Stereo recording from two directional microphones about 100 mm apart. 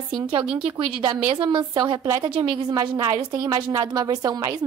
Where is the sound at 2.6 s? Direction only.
40° right (ahead or behind).